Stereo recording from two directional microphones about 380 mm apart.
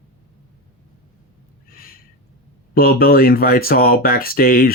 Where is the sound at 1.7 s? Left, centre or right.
Left.